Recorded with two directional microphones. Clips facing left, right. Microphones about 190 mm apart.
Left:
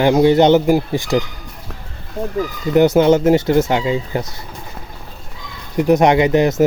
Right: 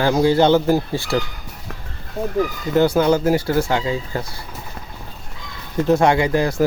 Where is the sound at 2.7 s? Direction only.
20° left (ahead or behind).